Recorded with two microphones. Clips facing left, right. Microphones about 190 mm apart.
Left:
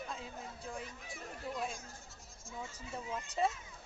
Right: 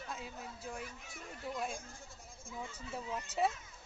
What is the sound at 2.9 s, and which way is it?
Speech, 5° right (ahead or behind).